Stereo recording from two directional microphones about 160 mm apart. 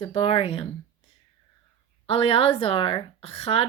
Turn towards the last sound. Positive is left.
turn(degrees=40)  # may be behind; listen again after turning